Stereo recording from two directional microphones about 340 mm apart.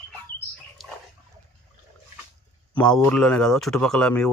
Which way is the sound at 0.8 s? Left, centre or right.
Centre.